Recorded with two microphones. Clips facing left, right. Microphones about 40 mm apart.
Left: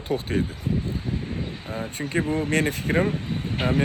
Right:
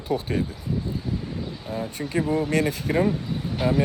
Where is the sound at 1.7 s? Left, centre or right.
Left.